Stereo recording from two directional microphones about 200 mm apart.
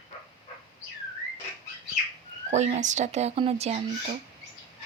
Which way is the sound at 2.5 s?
35° right (ahead or behind).